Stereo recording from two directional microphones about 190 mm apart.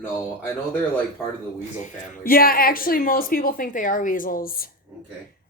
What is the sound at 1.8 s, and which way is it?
Speech, 40° left (ahead or behind).